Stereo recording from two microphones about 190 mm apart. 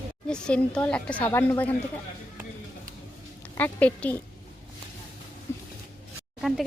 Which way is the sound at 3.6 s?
10° left (ahead or behind).